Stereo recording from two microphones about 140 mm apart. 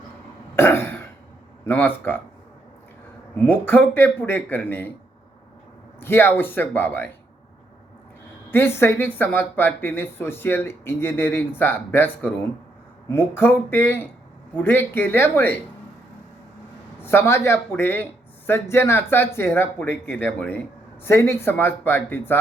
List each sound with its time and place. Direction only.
0.5 s cough: 15° left (ahead or behind)
1.6 s speech: 15° left (ahead or behind)
3.3 s speech: 10° left (ahead or behind)
6.0 s speech: 15° left (ahead or behind)
8.4 s speech: 15° left (ahead or behind)
17.0 s speech: 15° left (ahead or behind)